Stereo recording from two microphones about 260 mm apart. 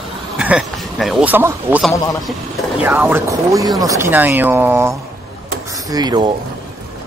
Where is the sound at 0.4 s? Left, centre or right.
Centre.